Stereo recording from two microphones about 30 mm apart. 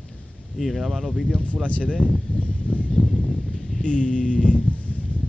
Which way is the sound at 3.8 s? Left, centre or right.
Left.